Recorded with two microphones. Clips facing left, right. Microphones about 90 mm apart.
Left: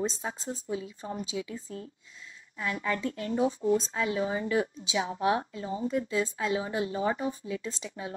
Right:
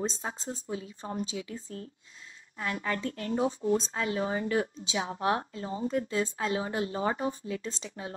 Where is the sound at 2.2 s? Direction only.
45° right (ahead or behind).